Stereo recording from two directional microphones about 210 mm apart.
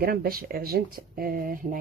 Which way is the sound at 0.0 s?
45° right (ahead or behind).